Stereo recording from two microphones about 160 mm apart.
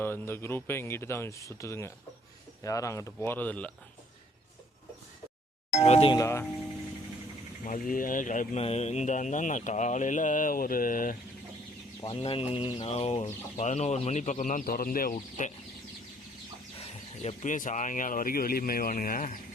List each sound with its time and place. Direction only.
0.0 s speech: 15° left (ahead or behind)
5.8 s speech: 40° left (ahead or behind)
6.1 s speech: 15° left (ahead or behind)
7.6 s speech: 55° left (ahead or behind)
8.6 s speech: 40° left (ahead or behind); by 11.2 s 60° left (ahead or behind)
12.0 s speech: 35° left (ahead or behind); by 15.5 s 55° left (ahead or behind)
16.7 s speech: 40° left (ahead or behind); by 19.4 s 60° left (ahead or behind)